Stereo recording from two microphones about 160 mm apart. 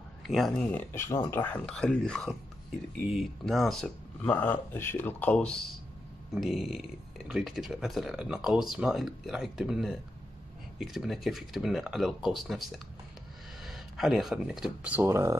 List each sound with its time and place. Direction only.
0.2 s speech: centre (ahead or behind)
0.7 s speech: 15° left (ahead or behind); by 15.3 s 15° right (ahead or behind)